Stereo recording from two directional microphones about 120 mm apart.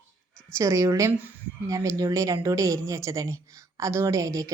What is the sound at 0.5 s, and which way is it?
A woman's voice, 25° right (ahead or behind).